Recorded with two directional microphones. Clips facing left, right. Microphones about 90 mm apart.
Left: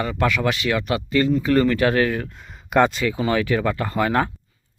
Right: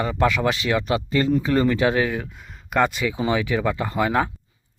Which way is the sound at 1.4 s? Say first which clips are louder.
Left 2 dB; 15° right (ahead or behind).